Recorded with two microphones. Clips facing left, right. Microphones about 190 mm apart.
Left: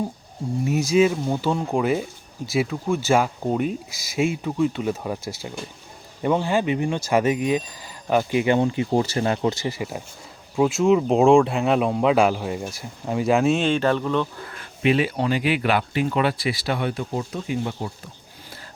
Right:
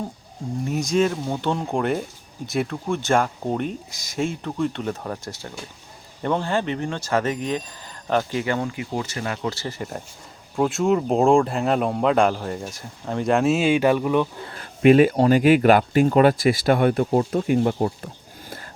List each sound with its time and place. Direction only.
0.6 s speech: 5° left (ahead or behind); by 14.3 s 15° right (ahead or behind)
14.8 s speech: 50° right (ahead or behind)